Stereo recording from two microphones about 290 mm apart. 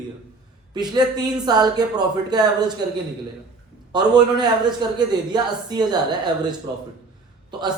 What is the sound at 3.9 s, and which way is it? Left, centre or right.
Speech, centre.